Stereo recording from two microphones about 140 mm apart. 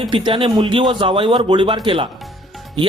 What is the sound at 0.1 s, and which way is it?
Speech, 35° right (ahead or behind).